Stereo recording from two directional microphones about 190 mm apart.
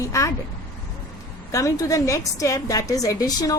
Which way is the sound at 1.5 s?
15° left (ahead or behind).